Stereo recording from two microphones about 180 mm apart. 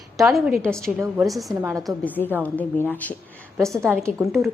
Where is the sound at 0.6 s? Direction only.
5° left (ahead or behind).